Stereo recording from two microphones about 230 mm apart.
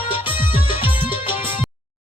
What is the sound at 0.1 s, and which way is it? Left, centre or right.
Music, left.